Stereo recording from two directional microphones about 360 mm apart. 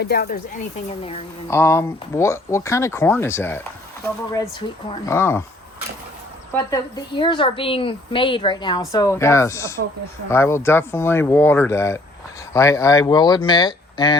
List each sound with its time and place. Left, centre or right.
0.0 s speech: left
1.0 s speech: centre
4.9 s speech: centre
6.5 s speech: centre